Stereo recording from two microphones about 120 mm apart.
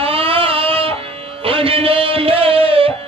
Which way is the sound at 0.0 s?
50° right (ahead or behind).